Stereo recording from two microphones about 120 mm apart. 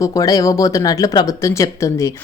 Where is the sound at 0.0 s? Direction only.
30° left (ahead or behind).